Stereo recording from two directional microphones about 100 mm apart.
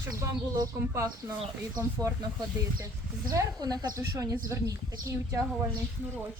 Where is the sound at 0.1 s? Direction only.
35° right (ahead or behind).